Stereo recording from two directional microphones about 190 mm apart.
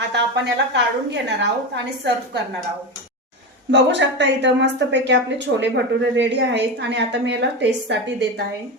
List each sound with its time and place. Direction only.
0.1 s a woman's voice: 65° right (ahead or behind)
3.7 s a woman's voice: 65° right (ahead or behind)